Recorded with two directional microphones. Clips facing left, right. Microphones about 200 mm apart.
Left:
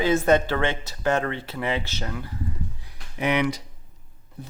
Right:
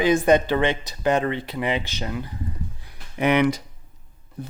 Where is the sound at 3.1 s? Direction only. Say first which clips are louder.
Right 4 dB; 55° right (ahead or behind).